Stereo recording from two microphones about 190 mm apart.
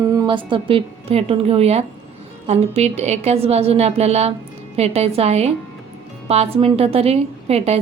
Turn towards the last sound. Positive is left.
turn(degrees=-30)  # may be behind; listen again after turning